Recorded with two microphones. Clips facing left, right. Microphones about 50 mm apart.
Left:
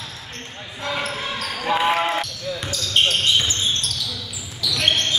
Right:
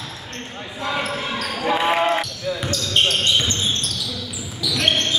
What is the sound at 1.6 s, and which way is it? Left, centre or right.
Basketball bounce, centre.